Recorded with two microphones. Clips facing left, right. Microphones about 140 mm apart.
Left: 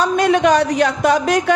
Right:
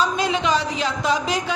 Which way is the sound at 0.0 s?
55° left (ahead or behind).